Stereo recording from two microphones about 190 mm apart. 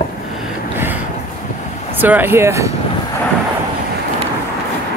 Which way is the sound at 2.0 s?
10° right (ahead or behind).